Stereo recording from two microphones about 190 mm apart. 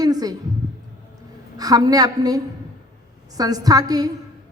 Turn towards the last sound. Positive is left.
turn(degrees=-20)  # may be behind; listen again after turning